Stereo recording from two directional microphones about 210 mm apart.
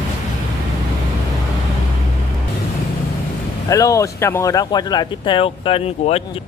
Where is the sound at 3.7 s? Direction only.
15° left (ahead or behind).